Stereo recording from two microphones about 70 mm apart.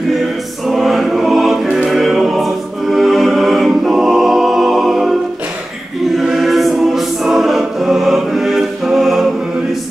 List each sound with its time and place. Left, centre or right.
0.7 s music: centre
6.1 s choir: centre